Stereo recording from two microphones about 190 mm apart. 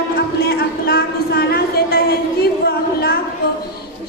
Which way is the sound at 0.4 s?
55° left (ahead or behind).